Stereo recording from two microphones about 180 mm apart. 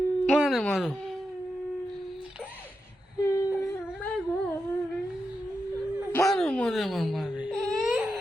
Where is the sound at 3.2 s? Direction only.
15° left (ahead or behind).